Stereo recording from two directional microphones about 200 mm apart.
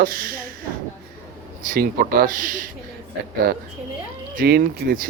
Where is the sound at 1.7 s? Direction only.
45° right (ahead or behind).